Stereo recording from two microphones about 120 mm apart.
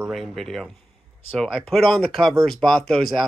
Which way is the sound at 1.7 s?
Centre (ahead or behind).